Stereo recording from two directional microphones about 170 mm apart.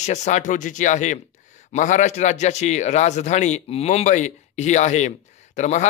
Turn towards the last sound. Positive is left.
turn(degrees=45)  # may be behind; listen again after turning